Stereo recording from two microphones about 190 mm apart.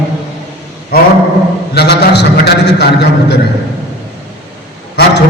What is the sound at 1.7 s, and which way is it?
A man's voice, 60° left (ahead or behind).